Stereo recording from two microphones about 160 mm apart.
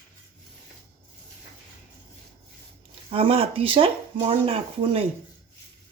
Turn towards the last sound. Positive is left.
turn(degrees=-35)  # may be behind; listen again after turning